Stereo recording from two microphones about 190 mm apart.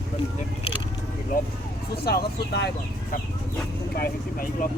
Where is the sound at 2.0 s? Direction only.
60° left (ahead or behind).